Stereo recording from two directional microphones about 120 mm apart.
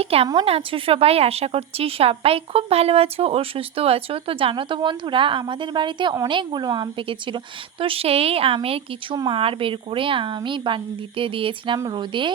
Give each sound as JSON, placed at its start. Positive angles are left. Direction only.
{"t": 0.0, "sound": "a woman's voice", "side_deg": -55}
{"t": 7.1, "sound": "a woman's voice", "side_deg": -45}
{"t": 9.1, "sound": "a woman's voice", "side_deg": -35}
{"t": 9.4, "sound": "a woman's voice", "side_deg": -50}